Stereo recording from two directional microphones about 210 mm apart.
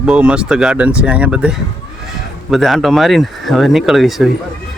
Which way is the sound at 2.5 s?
Centre (ahead or behind).